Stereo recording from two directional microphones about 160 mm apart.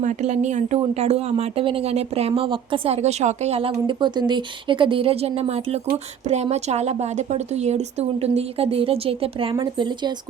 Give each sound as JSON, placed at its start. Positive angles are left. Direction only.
{"t": 0.0, "sound": "a woman's voice", "side_deg": -50}